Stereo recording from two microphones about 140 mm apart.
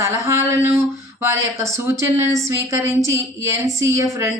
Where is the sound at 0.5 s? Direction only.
20° right (ahead or behind).